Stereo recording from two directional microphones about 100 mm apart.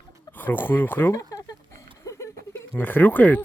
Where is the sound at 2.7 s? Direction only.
20° left (ahead or behind).